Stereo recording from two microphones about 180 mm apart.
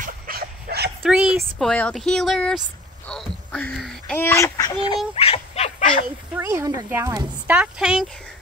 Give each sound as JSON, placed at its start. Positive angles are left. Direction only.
{"t": 0.0, "sound": "dog", "side_deg": -55}
{"t": 1.0, "sound": "speech", "side_deg": -5}
{"t": 4.2, "sound": "speech", "side_deg": 15}
{"t": 4.8, "sound": "speech", "side_deg": 30}
{"t": 6.3, "sound": "speech", "side_deg": -15}